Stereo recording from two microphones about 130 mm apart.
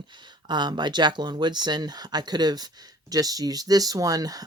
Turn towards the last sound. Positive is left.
turn(degrees=-30)  # may be behind; listen again after turning